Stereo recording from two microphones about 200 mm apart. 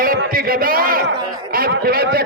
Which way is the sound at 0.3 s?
45° right (ahead or behind).